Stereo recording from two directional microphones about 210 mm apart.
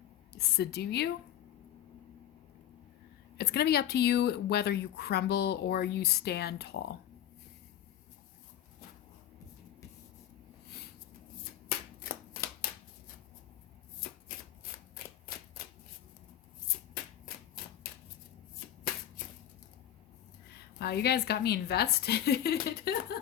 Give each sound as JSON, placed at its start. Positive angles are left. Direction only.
{"t": 0.3, "sound": "speech", "side_deg": 50}
{"t": 3.3, "sound": "speech", "side_deg": 50}
{"t": 12.0, "sound": "shuffling cards", "side_deg": 45}
{"t": 20.7, "sound": "speech", "side_deg": 50}